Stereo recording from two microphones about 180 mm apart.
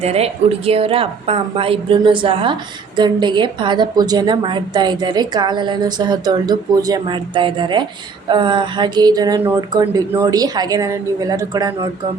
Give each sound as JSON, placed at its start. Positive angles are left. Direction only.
{"t": 0.0, "sound": "a woman's voice", "side_deg": -35}